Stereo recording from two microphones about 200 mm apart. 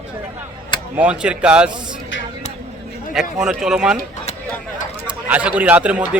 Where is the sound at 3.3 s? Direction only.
Centre (ahead or behind).